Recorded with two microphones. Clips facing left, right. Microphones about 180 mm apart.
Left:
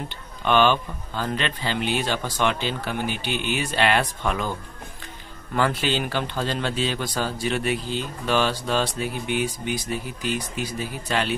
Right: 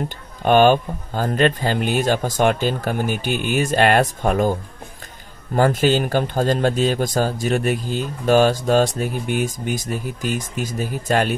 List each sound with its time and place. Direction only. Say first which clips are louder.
0.4 s a man's voice: right 6 dB; 45° right (ahead or behind)